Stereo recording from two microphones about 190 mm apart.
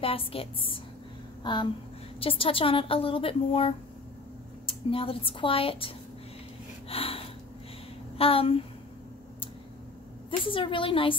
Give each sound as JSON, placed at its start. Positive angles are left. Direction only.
{"t": 0.0, "sound": "a woman's voice", "side_deg": 30}
{"t": 1.4, "sound": "a sound", "side_deg": 25}
{"t": 2.1, "sound": "a woman's voice", "side_deg": 30}
{"t": 6.9, "sound": "gasp", "side_deg": 30}
{"t": 8.2, "sound": "a woman's voice", "side_deg": 30}
{"t": 10.4, "sound": "a woman's voice", "side_deg": 25}